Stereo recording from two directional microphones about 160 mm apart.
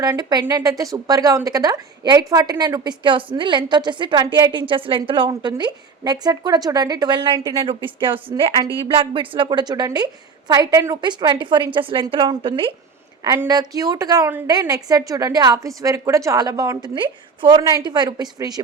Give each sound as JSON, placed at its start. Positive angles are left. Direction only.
{"t": 0.0, "sound": "a woman's voice", "side_deg": -25}